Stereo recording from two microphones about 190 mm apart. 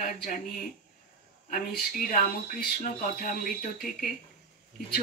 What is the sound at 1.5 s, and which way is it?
Speech, 45° left (ahead or behind).